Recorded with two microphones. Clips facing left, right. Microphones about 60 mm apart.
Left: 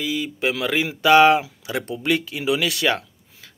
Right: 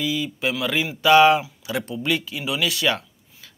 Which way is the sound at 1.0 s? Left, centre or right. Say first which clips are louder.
Left 1 dB; left.